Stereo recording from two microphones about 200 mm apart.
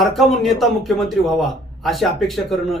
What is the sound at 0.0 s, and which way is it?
A man's voice, centre (ahead or behind).